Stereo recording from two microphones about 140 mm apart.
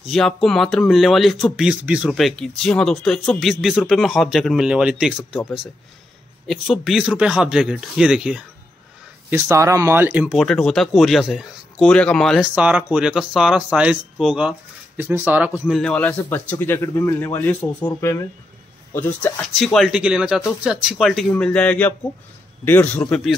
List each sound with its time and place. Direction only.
0.0 s speech: 5° left (ahead or behind)
6.4 s speech: centre (ahead or behind)
9.3 s speech: 20° right (ahead or behind)
10.4 s speech: 5° left (ahead or behind)
12.4 s speech: 10° right (ahead or behind)
15.6 s a man's voice: 5° left (ahead or behind)